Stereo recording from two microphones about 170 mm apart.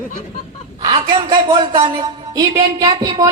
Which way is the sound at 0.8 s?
25° right (ahead or behind).